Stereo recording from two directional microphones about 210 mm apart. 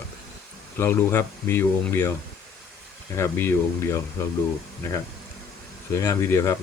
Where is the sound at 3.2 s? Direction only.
10° left (ahead or behind).